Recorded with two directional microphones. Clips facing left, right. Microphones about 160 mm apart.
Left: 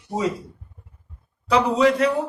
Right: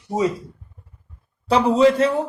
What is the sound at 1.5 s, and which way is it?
Speech, 30° right (ahead or behind).